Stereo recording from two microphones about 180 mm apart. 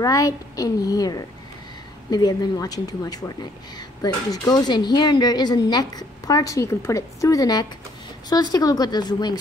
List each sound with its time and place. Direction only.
0.0 s speech: 20° left (ahead or behind)